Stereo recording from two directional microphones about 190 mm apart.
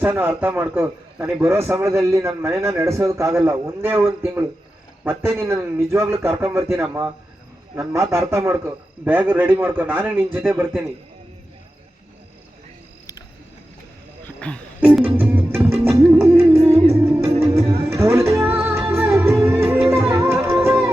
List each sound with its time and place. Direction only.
0.0 s a man's voice: 10° right (ahead or behind)
14.3 s a sound: 5° left (ahead or behind)
14.8 s music: 5° right (ahead or behind)
17.6 s music: 30° right (ahead or behind)
17.8 s music: 15° right (ahead or behind)